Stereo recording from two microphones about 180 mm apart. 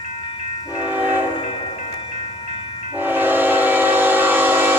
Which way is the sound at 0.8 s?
10° right (ahead or behind).